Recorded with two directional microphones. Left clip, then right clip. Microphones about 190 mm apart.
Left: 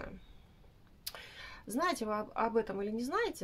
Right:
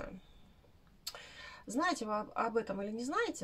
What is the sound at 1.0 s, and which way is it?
Speech, 40° left (ahead or behind).